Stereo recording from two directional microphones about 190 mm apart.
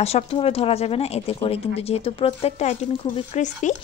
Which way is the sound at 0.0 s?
30° left (ahead or behind).